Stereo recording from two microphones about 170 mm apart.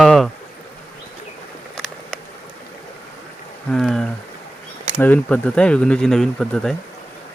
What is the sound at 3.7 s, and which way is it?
Speech, 5° left (ahead or behind).